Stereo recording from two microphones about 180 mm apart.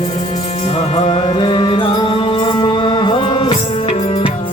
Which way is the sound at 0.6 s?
35° left (ahead or behind).